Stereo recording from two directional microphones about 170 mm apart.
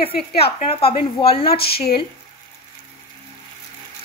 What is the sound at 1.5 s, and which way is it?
Speech, 65° left (ahead or behind).